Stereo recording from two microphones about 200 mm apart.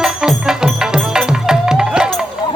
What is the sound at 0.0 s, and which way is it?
Music, 5° right (ahead or behind).